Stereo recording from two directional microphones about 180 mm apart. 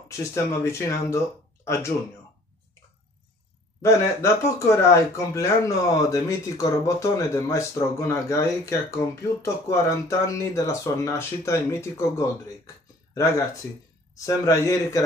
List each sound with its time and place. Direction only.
0.1 s speech: 15° left (ahead or behind)
3.8 s speech: 15° left (ahead or behind)